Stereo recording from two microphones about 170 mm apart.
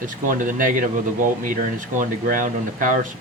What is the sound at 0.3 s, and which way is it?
Speech, 50° right (ahead or behind).